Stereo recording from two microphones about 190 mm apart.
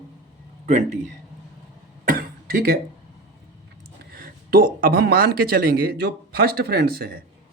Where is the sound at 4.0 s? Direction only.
50° right (ahead or behind).